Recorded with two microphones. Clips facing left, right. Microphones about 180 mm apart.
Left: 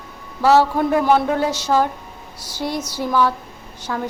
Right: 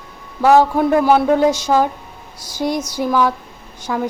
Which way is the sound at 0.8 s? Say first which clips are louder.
Right 3 dB; 5° right (ahead or behind).